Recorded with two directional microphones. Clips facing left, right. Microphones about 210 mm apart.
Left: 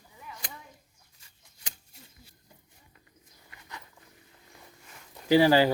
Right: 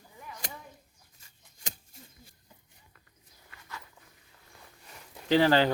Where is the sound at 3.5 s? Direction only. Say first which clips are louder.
Left 1 dB; 20° left (ahead or behind).